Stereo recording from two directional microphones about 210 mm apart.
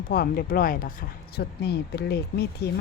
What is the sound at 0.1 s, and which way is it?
Speech, 45° left (ahead or behind).